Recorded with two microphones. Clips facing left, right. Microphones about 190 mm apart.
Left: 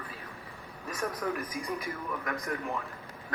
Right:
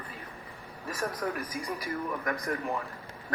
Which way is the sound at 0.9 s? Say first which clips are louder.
Even; 5° right (ahead or behind).